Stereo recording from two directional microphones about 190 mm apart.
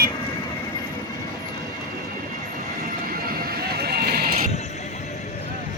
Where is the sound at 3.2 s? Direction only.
50° right (ahead or behind).